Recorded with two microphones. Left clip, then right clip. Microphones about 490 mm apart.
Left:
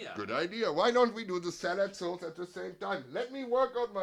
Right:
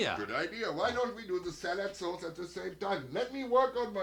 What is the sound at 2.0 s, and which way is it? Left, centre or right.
Speech, left.